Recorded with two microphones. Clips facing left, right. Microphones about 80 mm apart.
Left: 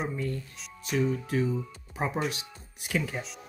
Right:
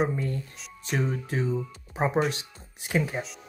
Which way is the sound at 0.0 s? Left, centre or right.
Right.